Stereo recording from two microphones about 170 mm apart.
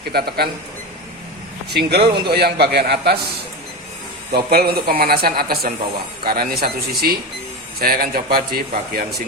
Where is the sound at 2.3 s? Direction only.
70° right (ahead or behind).